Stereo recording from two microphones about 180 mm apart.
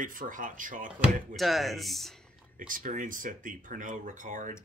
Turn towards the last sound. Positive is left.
turn(degrees=-45)  # may be behind; listen again after turning